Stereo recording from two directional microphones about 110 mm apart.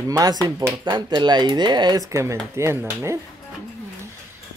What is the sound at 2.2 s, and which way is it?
Speech, 25° right (ahead or behind).